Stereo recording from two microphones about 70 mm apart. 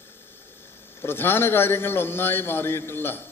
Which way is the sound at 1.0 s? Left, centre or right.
Left.